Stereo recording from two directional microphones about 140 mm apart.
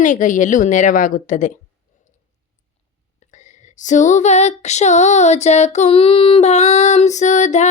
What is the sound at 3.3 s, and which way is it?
Female singing, 60° left (ahead or behind).